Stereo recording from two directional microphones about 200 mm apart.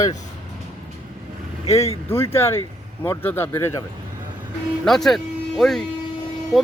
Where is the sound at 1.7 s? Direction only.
30° left (ahead or behind).